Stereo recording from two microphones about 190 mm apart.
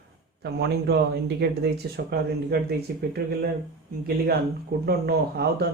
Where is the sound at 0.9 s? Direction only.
60° right (ahead or behind).